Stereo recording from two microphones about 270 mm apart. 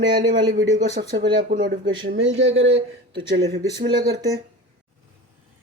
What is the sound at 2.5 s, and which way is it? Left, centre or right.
Speech, right.